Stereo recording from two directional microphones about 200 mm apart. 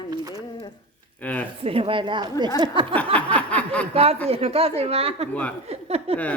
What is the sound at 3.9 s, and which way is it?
A woman's voice, 30° right (ahead or behind).